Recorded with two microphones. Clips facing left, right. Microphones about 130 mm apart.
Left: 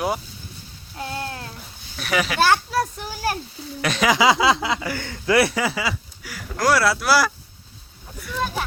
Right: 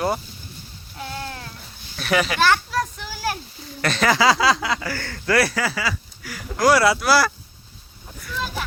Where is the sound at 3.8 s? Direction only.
10° left (ahead or behind).